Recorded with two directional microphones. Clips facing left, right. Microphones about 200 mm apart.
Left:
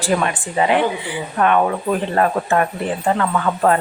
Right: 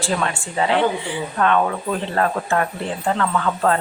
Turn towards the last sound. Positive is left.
turn(degrees=15)  # may be behind; listen again after turning